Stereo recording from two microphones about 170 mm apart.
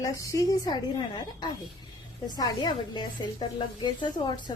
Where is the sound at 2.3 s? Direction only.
25° left (ahead or behind).